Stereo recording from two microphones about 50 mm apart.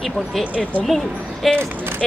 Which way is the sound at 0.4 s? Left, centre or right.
Left.